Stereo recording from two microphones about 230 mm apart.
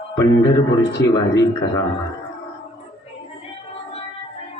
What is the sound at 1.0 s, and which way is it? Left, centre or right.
Speech, centre.